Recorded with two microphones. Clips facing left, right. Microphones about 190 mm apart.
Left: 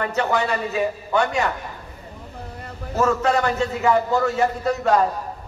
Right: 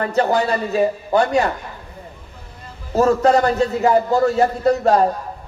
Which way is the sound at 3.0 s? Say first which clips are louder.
Right 5 dB; 35° right (ahead or behind).